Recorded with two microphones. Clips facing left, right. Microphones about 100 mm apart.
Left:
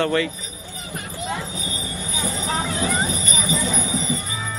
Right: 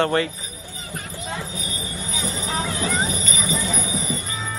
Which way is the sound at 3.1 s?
15° left (ahead or behind).